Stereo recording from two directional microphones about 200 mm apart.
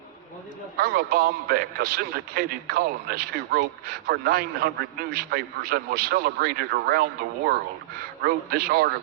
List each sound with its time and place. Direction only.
0.8 s a man's voice: 50° right (ahead or behind)